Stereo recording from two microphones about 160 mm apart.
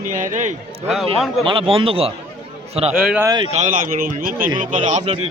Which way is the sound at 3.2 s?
25° right (ahead or behind).